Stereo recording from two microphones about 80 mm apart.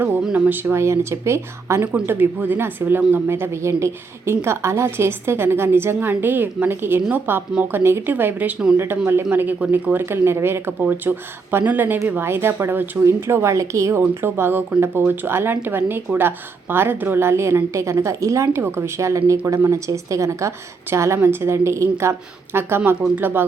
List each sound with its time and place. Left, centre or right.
0.2 s a woman's voice: centre; by 1.9 s right
1.9 s a woman's voice: right